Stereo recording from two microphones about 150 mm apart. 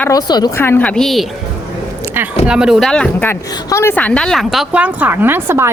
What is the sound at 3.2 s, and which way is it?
A woman's voice, 15° left (ahead or behind).